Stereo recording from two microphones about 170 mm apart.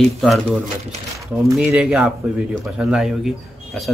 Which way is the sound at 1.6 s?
5° right (ahead or behind).